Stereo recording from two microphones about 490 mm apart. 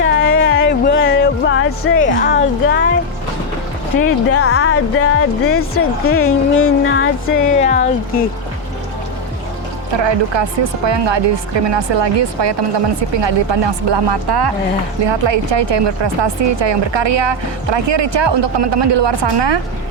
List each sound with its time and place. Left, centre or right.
0.0 s music: left
4.3 s speech: left
9.9 s a woman's voice: right
15.0 s a woman's voice: right